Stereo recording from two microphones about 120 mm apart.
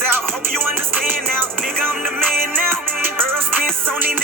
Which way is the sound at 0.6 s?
15° right (ahead or behind).